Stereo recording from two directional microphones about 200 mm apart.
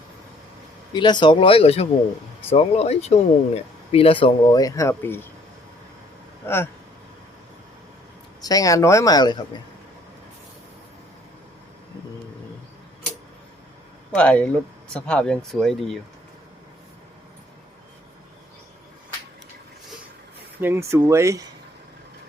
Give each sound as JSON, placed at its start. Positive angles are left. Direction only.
{"t": 0.9, "sound": "speech", "side_deg": 20}
{"t": 6.4, "sound": "speech", "side_deg": 10}
{"t": 8.4, "sound": "speech", "side_deg": 15}
{"t": 14.2, "sound": "speech", "side_deg": 5}
{"t": 20.6, "sound": "speech", "side_deg": -10}